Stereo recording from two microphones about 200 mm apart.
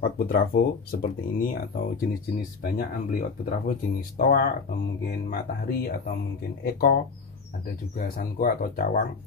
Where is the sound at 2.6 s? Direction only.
45° left (ahead or behind).